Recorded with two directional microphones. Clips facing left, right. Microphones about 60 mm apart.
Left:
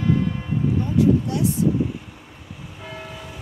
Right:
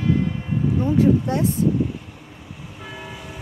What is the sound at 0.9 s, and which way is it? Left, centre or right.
Speech, right.